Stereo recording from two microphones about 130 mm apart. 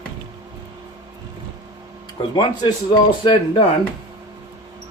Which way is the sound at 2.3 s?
30° left (ahead or behind).